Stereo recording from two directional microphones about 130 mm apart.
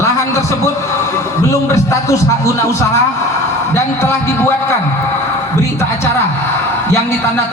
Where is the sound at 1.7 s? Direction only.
25° left (ahead or behind).